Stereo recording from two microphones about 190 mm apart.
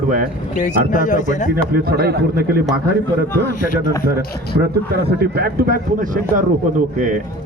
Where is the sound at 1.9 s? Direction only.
55° right (ahead or behind).